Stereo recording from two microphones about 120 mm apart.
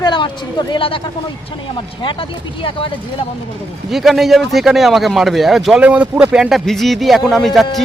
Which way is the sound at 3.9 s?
Centre (ahead or behind).